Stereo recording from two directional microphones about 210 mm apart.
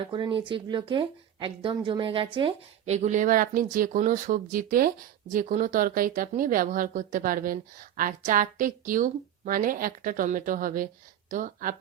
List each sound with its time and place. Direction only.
0.1 s speech: 20° right (ahead or behind); by 11.7 s 40° right (ahead or behind)